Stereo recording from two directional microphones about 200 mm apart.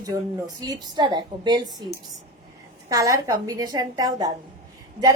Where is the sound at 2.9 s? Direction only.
15° right (ahead or behind).